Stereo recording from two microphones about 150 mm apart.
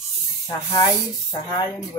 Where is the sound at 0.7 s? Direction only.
30° left (ahead or behind).